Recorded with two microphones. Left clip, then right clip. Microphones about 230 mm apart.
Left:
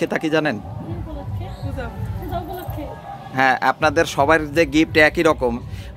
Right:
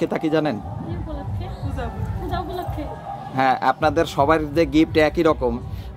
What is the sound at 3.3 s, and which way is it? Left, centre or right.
A man's voice, centre.